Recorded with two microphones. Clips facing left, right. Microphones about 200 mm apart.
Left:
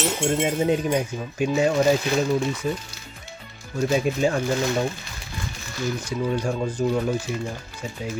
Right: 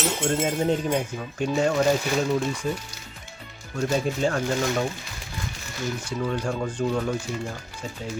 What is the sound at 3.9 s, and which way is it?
Speech, 10° left (ahead or behind).